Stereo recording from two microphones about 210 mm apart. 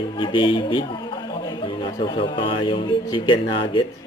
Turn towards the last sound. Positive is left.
turn(degrees=25)  # may be behind; listen again after turning